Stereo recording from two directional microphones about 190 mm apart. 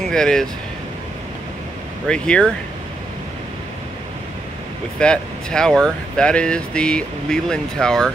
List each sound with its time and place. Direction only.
0.1 s speech: 5° left (ahead or behind)
2.0 s speech: 5° left (ahead or behind)
4.9 s speech: 5° left (ahead or behind)